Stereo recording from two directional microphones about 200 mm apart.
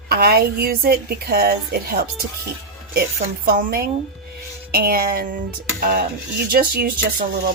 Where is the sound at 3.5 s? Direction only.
45° right (ahead or behind).